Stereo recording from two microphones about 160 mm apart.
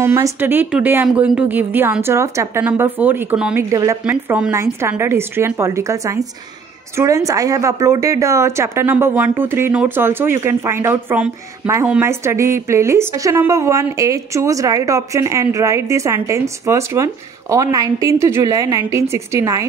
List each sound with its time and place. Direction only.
0.0 s speech: 15° right (ahead or behind)
3.5 s a woman's voice: 20° right (ahead or behind)
4.0 s a woman's voice: 10° right (ahead or behind)